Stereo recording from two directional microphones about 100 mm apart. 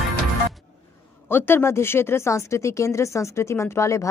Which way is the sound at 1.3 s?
25° left (ahead or behind).